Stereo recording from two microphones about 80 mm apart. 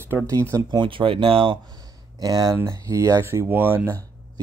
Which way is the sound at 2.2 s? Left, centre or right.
Right.